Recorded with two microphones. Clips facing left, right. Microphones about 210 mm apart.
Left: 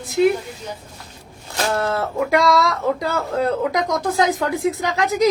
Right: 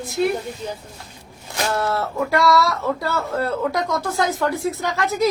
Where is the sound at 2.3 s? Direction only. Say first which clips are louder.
Even; 15° left (ahead or behind).